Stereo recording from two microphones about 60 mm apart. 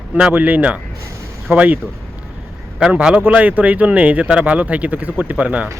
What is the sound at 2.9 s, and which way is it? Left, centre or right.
A man's voice, centre.